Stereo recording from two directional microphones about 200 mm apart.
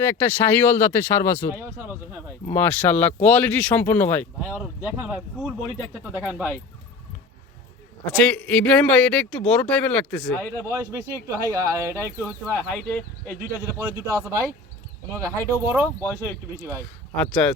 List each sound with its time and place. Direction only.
0.0 s speech: 10° left (ahead or behind)
1.5 s speech: 10° right (ahead or behind)
2.5 s speech: 10° left (ahead or behind)
4.5 s speech: 10° right (ahead or behind)
8.0 s speech: 5° left (ahead or behind)
10.7 s speech: 15° right (ahead or behind)
12.2 s speech: 5° left (ahead or behind)
13.7 s speech: 15° right (ahead or behind)
17.2 s speech: 5° left (ahead or behind)